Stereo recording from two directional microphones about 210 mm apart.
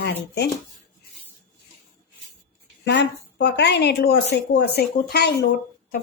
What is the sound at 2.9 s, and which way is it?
A woman's voice, 55° left (ahead or behind).